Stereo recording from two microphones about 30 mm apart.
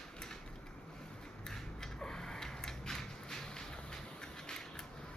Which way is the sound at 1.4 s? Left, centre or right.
Centre.